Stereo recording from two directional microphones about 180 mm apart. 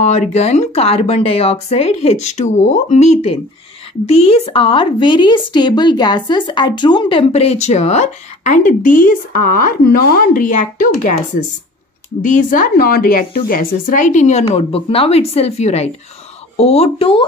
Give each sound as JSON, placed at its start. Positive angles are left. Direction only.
{"t": 0.0, "sound": "a woman's voice", "side_deg": 35}
{"t": 12.2, "sound": "a woman's voice", "side_deg": 45}